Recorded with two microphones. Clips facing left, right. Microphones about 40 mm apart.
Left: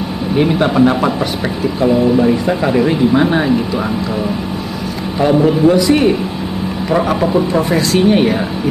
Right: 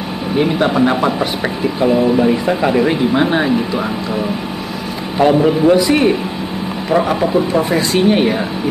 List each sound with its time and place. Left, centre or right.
0.4 s speech: centre
1.2 s speech: centre
5.2 s a man's voice: right
5.8 s speech: centre